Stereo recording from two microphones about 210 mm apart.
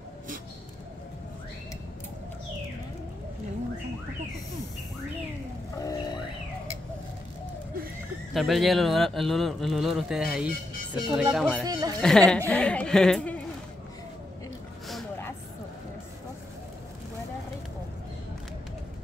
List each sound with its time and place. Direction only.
5.8 s music: 20° left (ahead or behind)
8.3 s a man's voice: centre (ahead or behind)
11.0 s speech: 15° right (ahead or behind)
11.3 s a man's voice: centre (ahead or behind)
11.6 s speech: 15° right (ahead or behind)
12.0 s a man's voice: 5° left (ahead or behind)